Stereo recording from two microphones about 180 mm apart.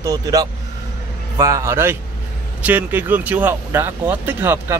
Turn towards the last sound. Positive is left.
turn(degrees=-10)  # may be behind; listen again after turning